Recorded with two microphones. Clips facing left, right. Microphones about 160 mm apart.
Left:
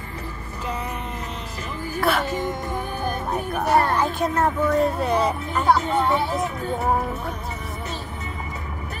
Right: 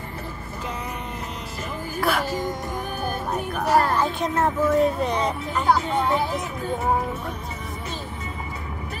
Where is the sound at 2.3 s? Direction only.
25° left (ahead or behind).